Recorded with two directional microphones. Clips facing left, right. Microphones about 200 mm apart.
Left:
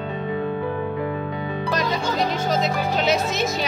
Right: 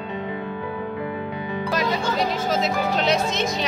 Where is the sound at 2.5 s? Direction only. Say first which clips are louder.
Even; centre (ahead or behind).